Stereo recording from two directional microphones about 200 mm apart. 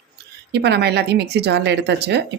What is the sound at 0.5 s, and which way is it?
Speech, 55° right (ahead or behind).